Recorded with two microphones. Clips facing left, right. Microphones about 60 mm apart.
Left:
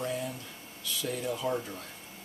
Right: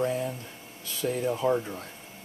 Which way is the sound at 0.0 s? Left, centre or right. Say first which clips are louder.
Right 6 dB; right.